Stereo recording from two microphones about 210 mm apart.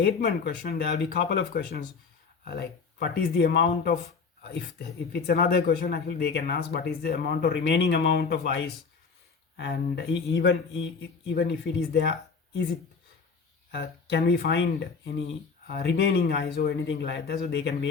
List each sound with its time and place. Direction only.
0.0 s speech: 50° left (ahead or behind)
13.7 s speech: 50° left (ahead or behind)